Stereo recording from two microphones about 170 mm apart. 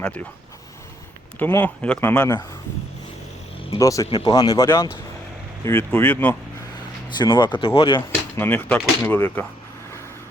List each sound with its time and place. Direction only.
0.0 s speech: 10° left (ahead or behind)
1.4 s speech: 10° left (ahead or behind)
3.8 s speech: 20° left (ahead or behind)
7.2 s speech: 25° left (ahead or behind)
8.1 s speech: 10° left (ahead or behind)